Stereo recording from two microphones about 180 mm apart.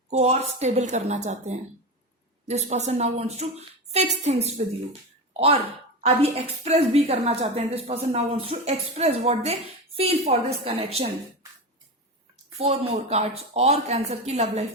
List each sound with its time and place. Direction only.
0.1 s speech: 35° right (ahead or behind)
6.0 s speech: 35° right (ahead or behind)
12.5 s speech: 35° right (ahead or behind)